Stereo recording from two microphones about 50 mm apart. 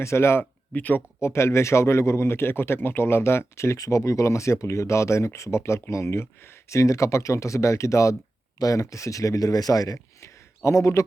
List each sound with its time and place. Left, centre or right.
0.0 s speech: left
0.7 s speech: left
1.2 s a man's voice: left
9.7 s a man's voice: left
10.2 s a sound: left